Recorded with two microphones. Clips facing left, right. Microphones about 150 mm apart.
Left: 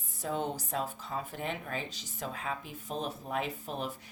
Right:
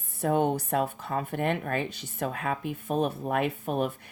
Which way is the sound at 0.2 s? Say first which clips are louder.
Right 9 dB; 60° right (ahead or behind).